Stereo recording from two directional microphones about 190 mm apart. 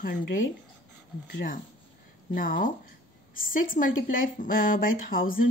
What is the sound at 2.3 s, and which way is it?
A woman's voice, 45° left (ahead or behind).